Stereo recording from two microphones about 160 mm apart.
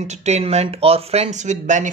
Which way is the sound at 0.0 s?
45° right (ahead or behind).